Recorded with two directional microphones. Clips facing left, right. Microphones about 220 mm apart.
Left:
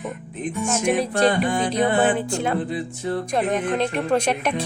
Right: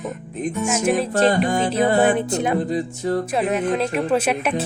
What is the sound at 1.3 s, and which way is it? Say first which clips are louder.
Music: right 2 dB; 40° right (ahead or behind).